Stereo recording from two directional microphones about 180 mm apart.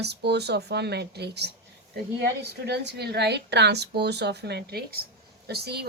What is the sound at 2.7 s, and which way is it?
A woman's voice, 70° right (ahead or behind).